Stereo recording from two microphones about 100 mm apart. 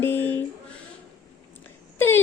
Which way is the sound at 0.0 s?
20° left (ahead or behind).